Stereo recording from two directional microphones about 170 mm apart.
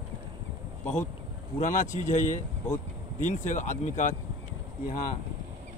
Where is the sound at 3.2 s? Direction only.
45° left (ahead or behind).